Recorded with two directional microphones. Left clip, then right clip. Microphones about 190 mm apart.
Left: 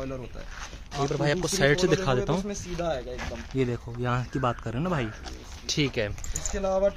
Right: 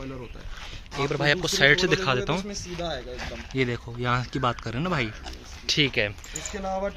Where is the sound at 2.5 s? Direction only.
30° left (ahead or behind).